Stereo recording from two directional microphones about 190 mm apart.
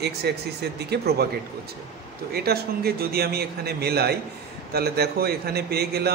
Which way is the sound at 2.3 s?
55° right (ahead or behind).